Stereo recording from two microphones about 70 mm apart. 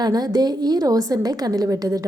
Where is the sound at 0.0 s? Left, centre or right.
Right.